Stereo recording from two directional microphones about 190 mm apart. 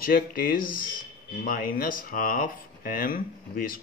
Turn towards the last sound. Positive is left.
turn(degrees=50)  # may be behind; listen again after turning